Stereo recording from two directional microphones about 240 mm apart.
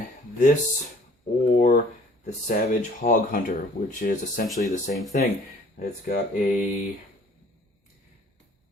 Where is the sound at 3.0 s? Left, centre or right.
Left.